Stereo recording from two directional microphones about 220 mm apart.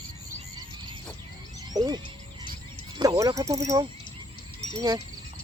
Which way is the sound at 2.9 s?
20° right (ahead or behind).